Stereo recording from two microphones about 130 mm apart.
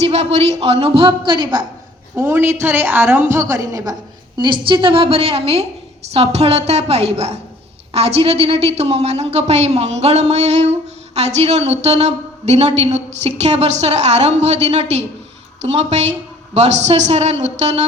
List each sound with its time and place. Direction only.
0.0 s a woman's voice: 55° right (ahead or behind); by 1.6 s 35° right (ahead or behind)
2.1 s a woman's voice: 15° right (ahead or behind)
4.4 s a woman's voice: 40° right (ahead or behind); by 17.8 s 60° right (ahead or behind)